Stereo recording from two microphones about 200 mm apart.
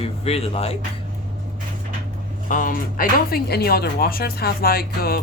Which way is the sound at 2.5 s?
40° left (ahead or behind).